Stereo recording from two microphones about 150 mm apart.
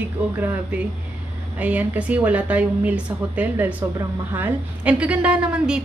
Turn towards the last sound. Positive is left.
turn(degrees=-5)  # may be behind; listen again after turning